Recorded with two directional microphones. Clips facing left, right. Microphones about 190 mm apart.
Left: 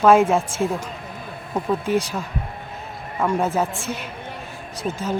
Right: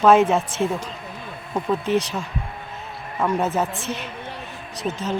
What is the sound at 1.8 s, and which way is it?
Speech, 55° left (ahead or behind).